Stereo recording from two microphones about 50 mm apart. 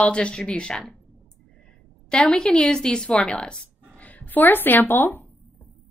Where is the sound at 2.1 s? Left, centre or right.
Centre; by 5.2 s left.